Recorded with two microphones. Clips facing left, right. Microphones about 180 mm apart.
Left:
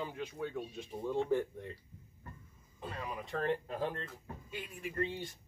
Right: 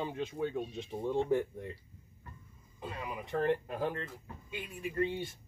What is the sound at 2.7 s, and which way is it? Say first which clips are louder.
Speech: right 1 dB; 10° right (ahead or behind).